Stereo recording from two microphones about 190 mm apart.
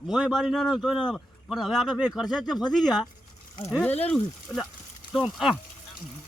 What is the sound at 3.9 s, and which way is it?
Speech, 35° left (ahead or behind).